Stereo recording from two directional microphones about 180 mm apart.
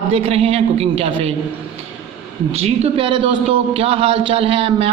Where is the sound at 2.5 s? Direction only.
35° right (ahead or behind).